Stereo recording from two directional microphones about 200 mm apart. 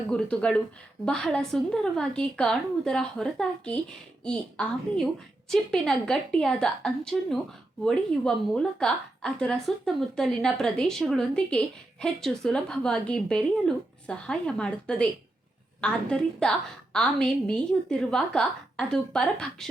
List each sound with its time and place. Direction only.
0.1 s a woman's voice: 5° left (ahead or behind)